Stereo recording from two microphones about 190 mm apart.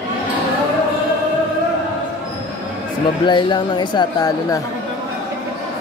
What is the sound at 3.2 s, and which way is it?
Speech, 25° left (ahead or behind).